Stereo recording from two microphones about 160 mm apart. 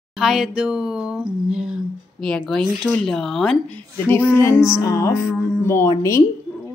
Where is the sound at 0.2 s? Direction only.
Centre (ahead or behind).